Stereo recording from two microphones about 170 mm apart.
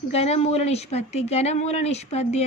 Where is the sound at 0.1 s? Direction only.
40° left (ahead or behind).